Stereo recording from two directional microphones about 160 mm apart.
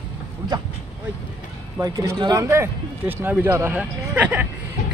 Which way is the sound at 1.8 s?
20° right (ahead or behind).